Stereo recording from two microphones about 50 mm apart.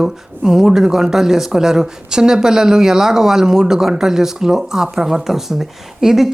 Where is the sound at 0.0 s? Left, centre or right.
Centre.